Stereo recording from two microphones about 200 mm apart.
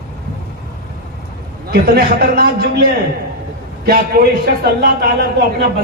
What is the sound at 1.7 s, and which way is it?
A man's voice, 50° right (ahead or behind).